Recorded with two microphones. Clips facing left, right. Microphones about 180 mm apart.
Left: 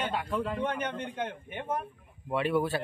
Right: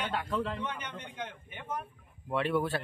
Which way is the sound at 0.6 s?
55° left (ahead or behind).